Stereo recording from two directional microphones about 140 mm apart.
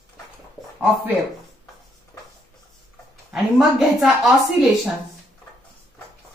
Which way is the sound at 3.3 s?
5° right (ahead or behind).